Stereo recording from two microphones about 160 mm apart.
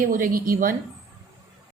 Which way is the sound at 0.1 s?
60° right (ahead or behind).